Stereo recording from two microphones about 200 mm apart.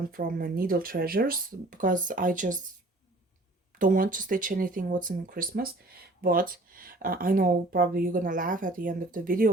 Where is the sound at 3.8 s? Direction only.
40° right (ahead or behind).